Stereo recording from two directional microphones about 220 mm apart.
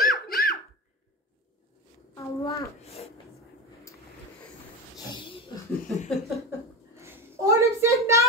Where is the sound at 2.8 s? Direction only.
30° left (ahead or behind).